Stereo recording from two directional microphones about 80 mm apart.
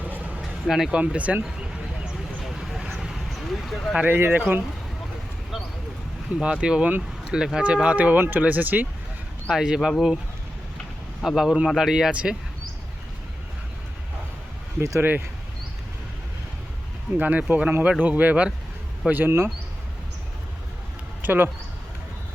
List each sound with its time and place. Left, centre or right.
0.0 s a sound: centre
0.7 s speech: centre
2.4 s a sound: centre
3.9 s speech: right
6.4 s speech: centre
9.5 s speech: centre
11.2 s speech: centre
14.8 s speech: right
17.2 s speech: centre
21.2 s speech: right